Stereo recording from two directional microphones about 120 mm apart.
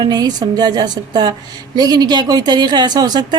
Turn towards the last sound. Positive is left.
turn(degrees=-35)  # may be behind; listen again after turning